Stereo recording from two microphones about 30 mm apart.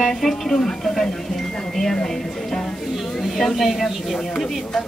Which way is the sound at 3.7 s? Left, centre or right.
Centre.